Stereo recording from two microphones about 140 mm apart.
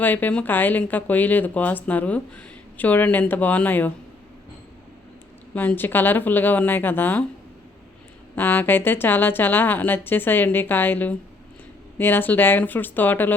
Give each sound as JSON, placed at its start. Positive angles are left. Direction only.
{"t": 0.0, "sound": "speech", "side_deg": 10}
{"t": 5.5, "sound": "speech", "side_deg": 15}
{"t": 8.4, "sound": "speech", "side_deg": 15}